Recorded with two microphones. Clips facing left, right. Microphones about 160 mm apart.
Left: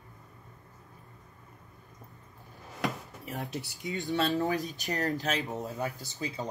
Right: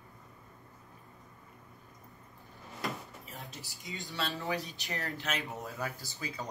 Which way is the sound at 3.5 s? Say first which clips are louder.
Left 9 dB; 70° left (ahead or behind).